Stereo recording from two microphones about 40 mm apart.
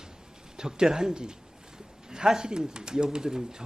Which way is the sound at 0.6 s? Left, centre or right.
Centre.